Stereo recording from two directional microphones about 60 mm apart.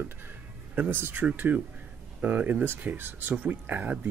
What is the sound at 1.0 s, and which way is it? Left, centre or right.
Speech, right.